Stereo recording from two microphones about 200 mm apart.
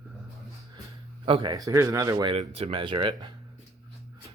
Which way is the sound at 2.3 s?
30° right (ahead or behind).